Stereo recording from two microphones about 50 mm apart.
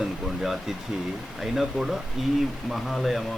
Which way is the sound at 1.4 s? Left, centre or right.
Centre.